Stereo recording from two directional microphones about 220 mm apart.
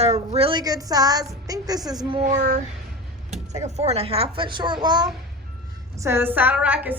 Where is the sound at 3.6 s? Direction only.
30° right (ahead or behind).